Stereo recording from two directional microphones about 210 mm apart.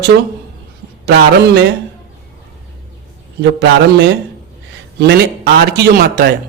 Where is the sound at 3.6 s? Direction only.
55° right (ahead or behind).